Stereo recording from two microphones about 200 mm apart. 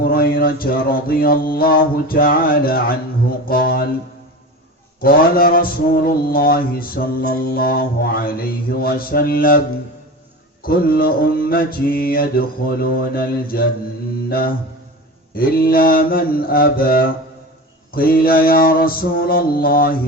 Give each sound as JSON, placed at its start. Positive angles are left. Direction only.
{"t": 0.0, "sound": "a man's voice", "side_deg": 50}
{"t": 4.9, "sound": "a man's voice", "side_deg": 45}
{"t": 10.6, "sound": "a man's voice", "side_deg": 45}
{"t": 14.3, "sound": "mantra", "side_deg": 45}
{"t": 15.4, "sound": "a man's voice", "side_deg": 45}